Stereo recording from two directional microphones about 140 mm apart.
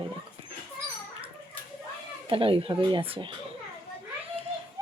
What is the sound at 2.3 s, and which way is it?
Speech, 40° right (ahead or behind).